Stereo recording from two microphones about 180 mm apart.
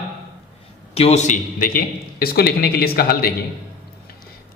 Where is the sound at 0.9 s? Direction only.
35° left (ahead or behind); by 3.3 s 55° left (ahead or behind).